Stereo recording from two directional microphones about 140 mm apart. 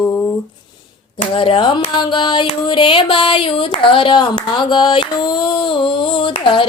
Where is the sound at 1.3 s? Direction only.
40° left (ahead or behind).